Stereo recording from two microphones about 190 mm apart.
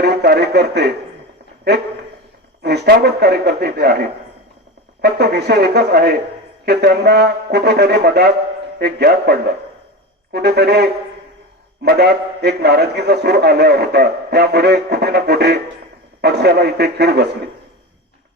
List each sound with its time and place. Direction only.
0.0 s a man's voice: 60° right (ahead or behind)
5.0 s a man's voice: 60° right (ahead or behind)